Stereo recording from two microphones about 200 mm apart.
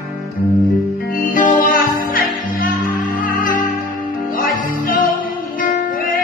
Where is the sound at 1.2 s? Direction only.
40° left (ahead or behind).